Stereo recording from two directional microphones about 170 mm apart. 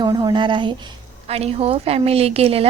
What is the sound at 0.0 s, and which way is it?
A woman's voice, 25° right (ahead or behind).